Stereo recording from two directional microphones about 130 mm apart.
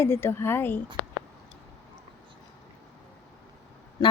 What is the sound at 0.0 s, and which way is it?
Speech, 20° left (ahead or behind).